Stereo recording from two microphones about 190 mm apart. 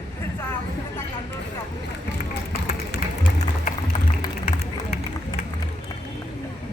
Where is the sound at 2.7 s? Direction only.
60° left (ahead or behind).